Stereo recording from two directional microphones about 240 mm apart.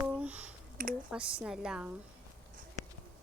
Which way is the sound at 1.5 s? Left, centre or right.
Centre.